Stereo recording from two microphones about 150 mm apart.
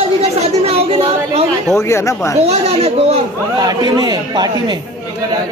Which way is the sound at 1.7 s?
20° left (ahead or behind).